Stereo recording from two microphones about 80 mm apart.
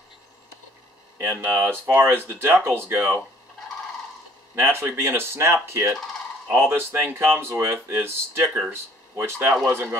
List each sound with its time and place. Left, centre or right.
1.2 s speech: right
4.6 s speech: right